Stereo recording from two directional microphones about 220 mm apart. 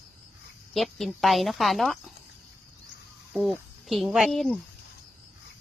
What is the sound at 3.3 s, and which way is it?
Speech, centre (ahead or behind).